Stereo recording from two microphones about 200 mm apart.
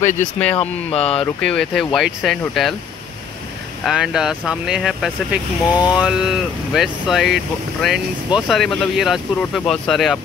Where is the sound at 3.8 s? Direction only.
5° right (ahead or behind).